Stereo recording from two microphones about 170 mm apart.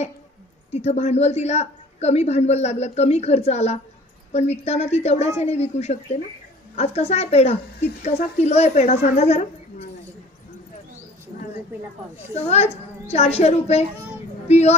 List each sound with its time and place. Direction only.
0.7 s a woman's voice: 40° left (ahead or behind)
12.4 s a woman's voice: 40° left (ahead or behind)